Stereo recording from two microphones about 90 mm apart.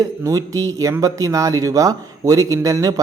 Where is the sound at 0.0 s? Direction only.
40° right (ahead or behind).